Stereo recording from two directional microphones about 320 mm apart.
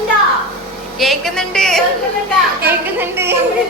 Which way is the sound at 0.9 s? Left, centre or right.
Centre.